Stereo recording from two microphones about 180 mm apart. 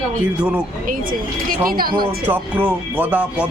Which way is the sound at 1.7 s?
55° right (ahead or behind).